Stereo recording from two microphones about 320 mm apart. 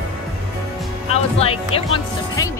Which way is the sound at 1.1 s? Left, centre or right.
Centre.